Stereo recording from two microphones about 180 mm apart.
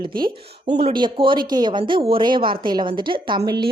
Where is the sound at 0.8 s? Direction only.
30° right (ahead or behind).